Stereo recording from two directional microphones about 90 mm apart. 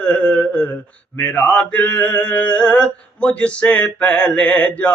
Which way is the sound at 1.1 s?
15° left (ahead or behind).